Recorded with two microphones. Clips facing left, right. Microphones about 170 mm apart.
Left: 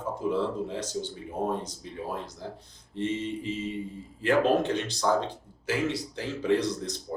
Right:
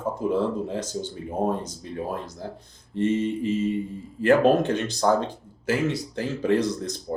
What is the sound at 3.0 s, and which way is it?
Speech, 50° right (ahead or behind).